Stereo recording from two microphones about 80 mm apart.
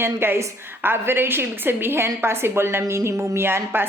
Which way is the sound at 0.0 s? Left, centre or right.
Right.